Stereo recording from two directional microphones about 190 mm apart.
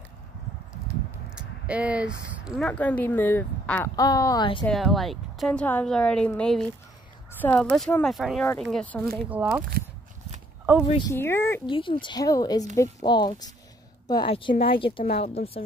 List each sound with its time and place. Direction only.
1.3 s speech: 5° right (ahead or behind); by 4.6 s 25° left (ahead or behind)
4.6 s a woman's voice: centre (ahead or behind)
9.3 s speech: 10° right (ahead or behind)
11.1 s speech: 15° left (ahead or behind)
11.6 s a woman's voice: 25° left (ahead or behind)